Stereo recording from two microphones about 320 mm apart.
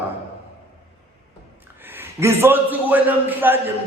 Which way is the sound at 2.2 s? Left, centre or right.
Centre.